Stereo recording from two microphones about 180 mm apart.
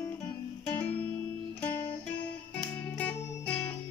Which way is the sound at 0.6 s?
5° left (ahead or behind).